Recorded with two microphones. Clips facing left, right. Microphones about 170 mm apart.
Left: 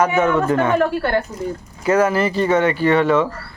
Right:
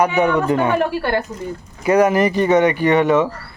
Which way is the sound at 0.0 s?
15° right (ahead or behind).